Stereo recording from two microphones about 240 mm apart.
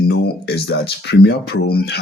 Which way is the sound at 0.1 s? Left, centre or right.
Left.